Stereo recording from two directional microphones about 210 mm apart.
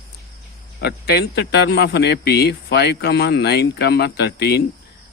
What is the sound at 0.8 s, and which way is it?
Speech, 50° left (ahead or behind).